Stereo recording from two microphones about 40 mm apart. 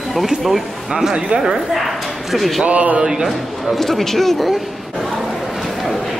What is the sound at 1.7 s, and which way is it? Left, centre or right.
Speech, centre.